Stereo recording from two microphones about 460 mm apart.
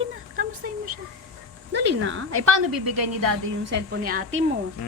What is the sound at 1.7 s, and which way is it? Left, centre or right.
Speech, right.